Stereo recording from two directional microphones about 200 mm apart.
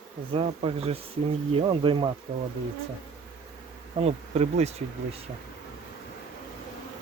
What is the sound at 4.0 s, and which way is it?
Speech, 30° right (ahead or behind).